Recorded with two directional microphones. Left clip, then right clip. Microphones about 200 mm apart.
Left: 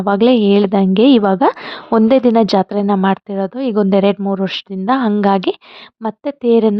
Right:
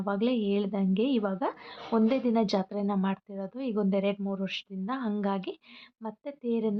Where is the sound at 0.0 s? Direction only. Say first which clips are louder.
Left 17 dB; 50° left (ahead or behind).